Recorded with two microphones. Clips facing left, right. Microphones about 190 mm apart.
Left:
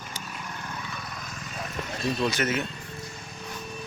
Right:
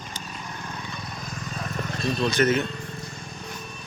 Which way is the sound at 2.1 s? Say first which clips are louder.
Right 6 dB; 5° left (ahead or behind).